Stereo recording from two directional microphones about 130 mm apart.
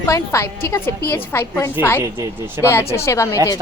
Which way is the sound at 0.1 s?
20° left (ahead or behind).